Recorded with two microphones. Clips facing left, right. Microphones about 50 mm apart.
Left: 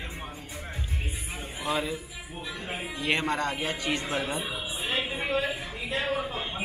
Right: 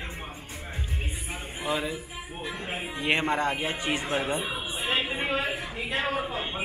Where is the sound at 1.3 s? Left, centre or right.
Centre.